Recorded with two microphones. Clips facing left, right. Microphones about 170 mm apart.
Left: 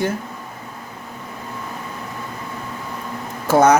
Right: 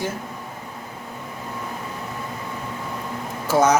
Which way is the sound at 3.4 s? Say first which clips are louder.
Left 4 dB; 60° left (ahead or behind).